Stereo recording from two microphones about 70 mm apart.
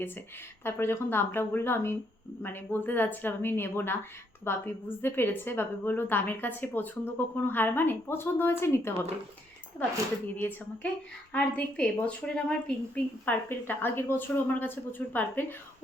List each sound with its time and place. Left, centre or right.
0.6 s a woman's voice: left
10.4 s a woman's voice: left
13.2 s a woman's voice: left